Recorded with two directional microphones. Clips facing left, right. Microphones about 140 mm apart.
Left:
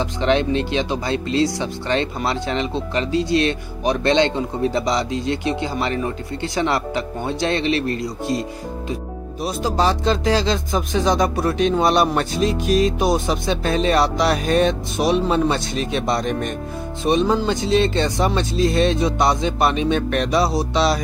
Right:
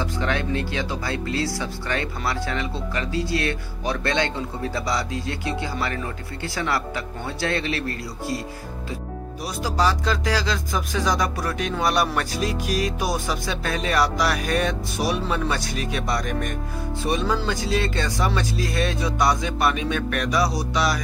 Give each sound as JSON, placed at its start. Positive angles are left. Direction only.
{"t": 0.0, "sound": "speech", "side_deg": 20}
{"t": 9.4, "sound": "speech", "side_deg": 25}